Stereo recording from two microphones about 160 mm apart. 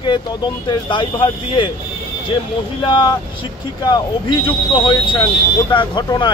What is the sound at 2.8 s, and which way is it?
Speech, 30° left (ahead or behind).